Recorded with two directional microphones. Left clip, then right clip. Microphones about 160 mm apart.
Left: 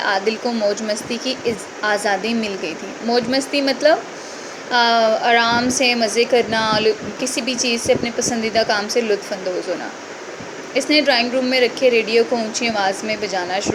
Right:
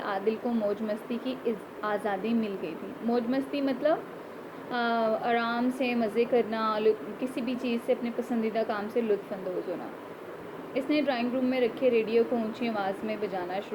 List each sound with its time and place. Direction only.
0.0 s a woman's voice: 20° left (ahead or behind)
10.8 s a woman's voice: 20° left (ahead or behind)